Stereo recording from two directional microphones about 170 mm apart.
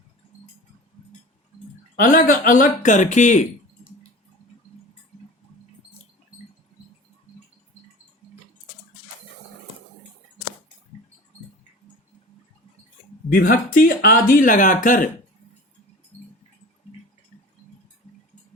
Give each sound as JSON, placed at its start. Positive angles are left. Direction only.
{"t": 2.0, "sound": "speech", "side_deg": 55}
{"t": 13.3, "sound": "speech", "side_deg": 50}